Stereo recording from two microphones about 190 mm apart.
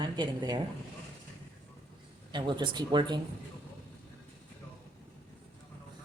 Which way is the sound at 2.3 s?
25° right (ahead or behind).